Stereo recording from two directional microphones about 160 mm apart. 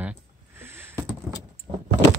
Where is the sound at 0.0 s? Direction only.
15° right (ahead or behind).